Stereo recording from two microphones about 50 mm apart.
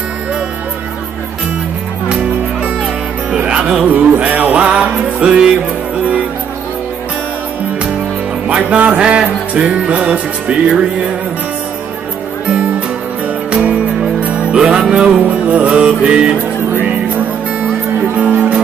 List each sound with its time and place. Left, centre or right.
3.9 s music: right
8.6 s music: right
12.4 s music: right
14.5 s music: centre
15.2 s music: right
18.1 s speech: right